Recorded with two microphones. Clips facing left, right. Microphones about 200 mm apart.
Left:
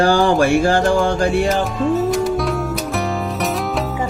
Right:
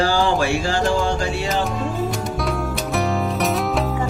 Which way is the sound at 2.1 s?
Centre (ahead or behind).